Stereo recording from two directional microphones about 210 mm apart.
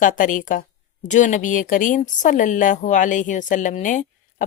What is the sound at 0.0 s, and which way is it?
Speech, 40° left (ahead or behind).